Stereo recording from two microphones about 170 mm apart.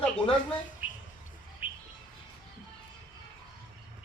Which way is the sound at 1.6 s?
10° right (ahead or behind).